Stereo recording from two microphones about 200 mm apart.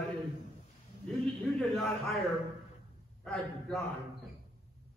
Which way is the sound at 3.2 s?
Centre (ahead or behind).